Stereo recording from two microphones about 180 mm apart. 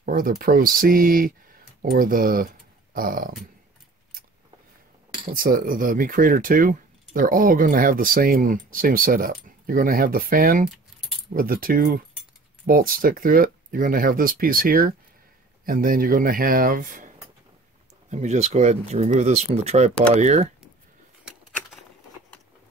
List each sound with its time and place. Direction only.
0.0 s speech: 50° right (ahead or behind)
5.3 s speech: 50° right (ahead or behind)
18.1 s speech: 40° right (ahead or behind)